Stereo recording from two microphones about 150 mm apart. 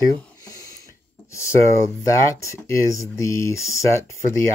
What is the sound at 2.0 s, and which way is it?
Speech, 20° left (ahead or behind).